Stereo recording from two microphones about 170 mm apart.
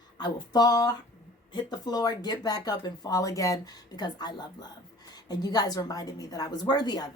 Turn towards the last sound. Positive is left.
turn(degrees=25)  # may be behind; listen again after turning